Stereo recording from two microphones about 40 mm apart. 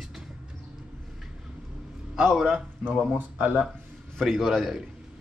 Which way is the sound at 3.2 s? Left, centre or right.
Right.